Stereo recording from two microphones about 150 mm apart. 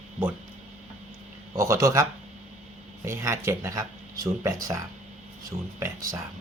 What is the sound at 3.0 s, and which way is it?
Speech, 20° right (ahead or behind).